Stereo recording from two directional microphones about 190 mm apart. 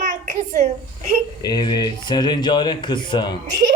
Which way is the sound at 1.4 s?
20° left (ahead or behind).